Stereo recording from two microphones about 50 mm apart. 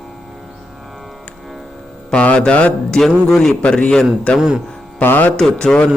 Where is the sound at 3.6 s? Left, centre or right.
Left.